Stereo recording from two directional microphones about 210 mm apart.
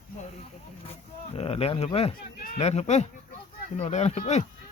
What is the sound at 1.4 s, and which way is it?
Speech, 30° left (ahead or behind).